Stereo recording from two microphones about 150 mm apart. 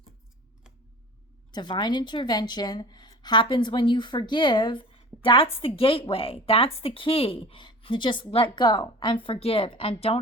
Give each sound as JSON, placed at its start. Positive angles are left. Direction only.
{"t": 1.5, "sound": "a woman's voice", "side_deg": 30}